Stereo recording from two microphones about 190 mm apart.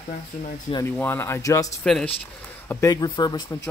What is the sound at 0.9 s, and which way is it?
Speech, 10° left (ahead or behind).